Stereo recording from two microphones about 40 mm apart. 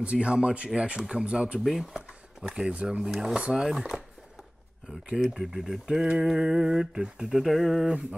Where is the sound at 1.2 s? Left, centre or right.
Right.